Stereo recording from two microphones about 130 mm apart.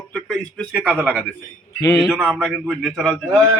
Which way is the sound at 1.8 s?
25° left (ahead or behind).